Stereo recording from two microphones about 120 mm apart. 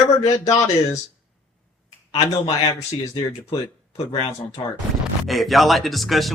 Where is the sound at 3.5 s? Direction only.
55° left (ahead or behind).